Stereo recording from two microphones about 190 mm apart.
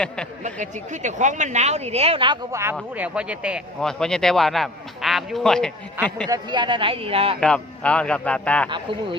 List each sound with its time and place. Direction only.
0.4 s a woman's voice: 40° right (ahead or behind); by 6.2 s 5° left (ahead or behind)
6.2 s speech: 20° right (ahead or behind)
7.3 s a man's voice: 5° left (ahead or behind)